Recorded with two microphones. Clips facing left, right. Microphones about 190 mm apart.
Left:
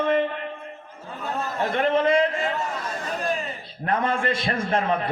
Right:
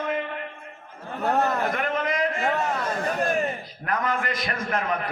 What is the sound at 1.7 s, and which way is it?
Speech, 30° left (ahead or behind).